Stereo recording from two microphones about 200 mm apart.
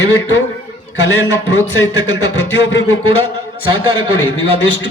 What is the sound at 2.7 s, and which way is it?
Speech, 90° left.